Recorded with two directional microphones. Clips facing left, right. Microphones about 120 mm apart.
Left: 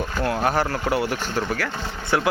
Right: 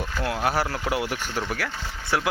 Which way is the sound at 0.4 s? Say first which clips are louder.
Left 1 dB; 5° right (ahead or behind).